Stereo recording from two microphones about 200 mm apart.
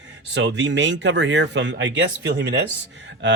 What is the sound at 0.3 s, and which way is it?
Speech, 65° right (ahead or behind).